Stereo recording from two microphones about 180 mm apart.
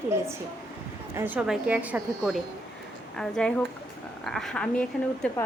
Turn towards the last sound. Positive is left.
turn(degrees=5)  # may be behind; listen again after turning